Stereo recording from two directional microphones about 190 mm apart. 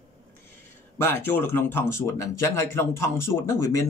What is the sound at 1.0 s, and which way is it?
Speech, 10° left (ahead or behind).